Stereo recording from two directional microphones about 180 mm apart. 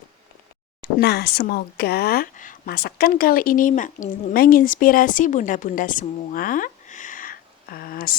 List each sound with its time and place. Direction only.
0.8 s speech: 65° left (ahead or behind)